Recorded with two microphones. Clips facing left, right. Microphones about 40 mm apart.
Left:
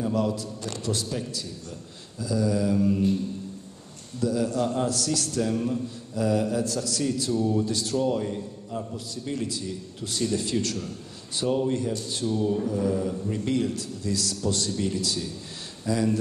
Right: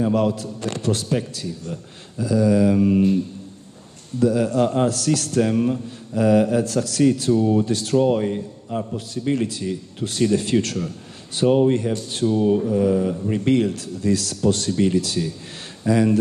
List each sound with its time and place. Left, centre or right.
0.0 s a man's voice: right
4.2 s a man's voice: right